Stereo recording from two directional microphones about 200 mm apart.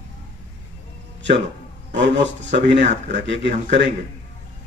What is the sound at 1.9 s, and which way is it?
Speech, 65° right (ahead or behind).